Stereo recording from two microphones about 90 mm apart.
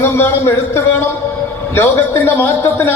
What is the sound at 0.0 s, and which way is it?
A man's voice, 30° left (ahead or behind).